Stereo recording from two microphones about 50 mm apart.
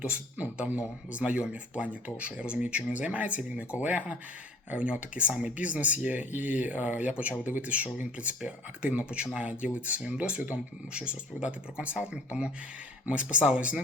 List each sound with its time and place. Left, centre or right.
0.0 s speech: right